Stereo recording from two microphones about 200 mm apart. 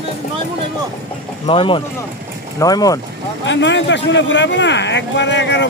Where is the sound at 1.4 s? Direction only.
25° left (ahead or behind).